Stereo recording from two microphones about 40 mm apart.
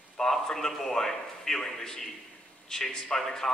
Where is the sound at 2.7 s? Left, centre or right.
Centre.